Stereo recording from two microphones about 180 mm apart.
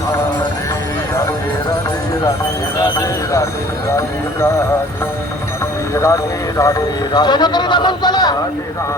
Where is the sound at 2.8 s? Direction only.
15° left (ahead or behind).